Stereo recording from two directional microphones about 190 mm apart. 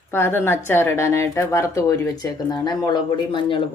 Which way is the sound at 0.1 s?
10° left (ahead or behind).